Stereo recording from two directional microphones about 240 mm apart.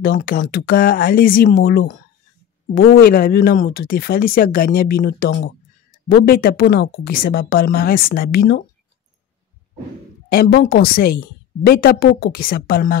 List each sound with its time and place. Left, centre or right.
0.0 s a woman's voice: left
3.0 s a woman's voice: left
10.3 s a woman's voice: left